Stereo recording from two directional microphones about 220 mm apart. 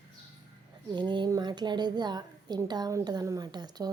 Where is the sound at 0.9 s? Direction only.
20° right (ahead or behind).